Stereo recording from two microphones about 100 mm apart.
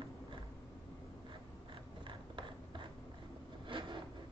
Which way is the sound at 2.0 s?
55° right (ahead or behind).